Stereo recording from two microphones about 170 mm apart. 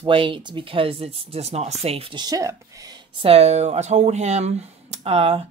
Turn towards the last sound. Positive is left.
turn(degrees=-35)  # may be behind; listen again after turning